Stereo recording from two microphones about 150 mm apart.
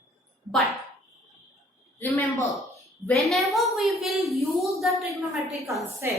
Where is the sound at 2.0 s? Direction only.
20° left (ahead or behind).